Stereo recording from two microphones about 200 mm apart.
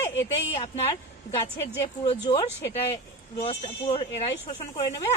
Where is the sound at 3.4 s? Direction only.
30° left (ahead or behind).